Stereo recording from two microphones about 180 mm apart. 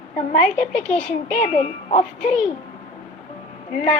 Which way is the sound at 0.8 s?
40° left (ahead or behind).